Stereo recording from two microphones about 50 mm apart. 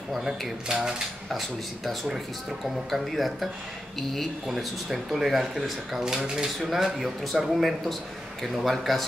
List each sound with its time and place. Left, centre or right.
0.1 s a man's voice: centre
2.9 s a man's voice: centre
4.5 s a man's voice: centre